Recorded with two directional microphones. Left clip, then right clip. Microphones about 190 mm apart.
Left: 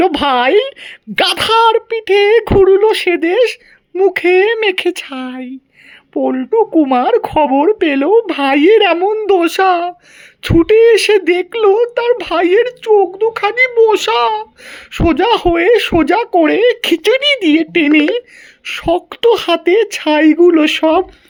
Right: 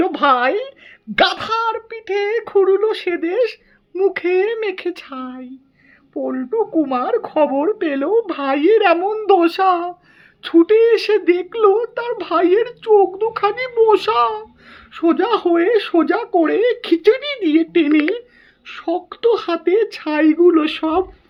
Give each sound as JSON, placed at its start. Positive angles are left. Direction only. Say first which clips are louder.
{"t": 0.0, "sound": "speech", "louder": "left 3 dB", "side_deg": 30}